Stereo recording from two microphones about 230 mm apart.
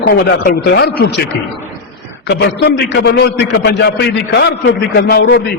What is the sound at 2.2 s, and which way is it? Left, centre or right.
A man's voice, left.